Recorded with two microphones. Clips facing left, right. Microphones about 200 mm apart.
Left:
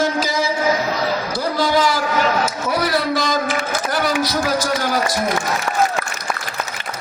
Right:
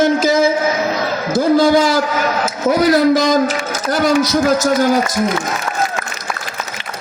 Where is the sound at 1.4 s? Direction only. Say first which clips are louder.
Right 9 dB; 50° right (ahead or behind).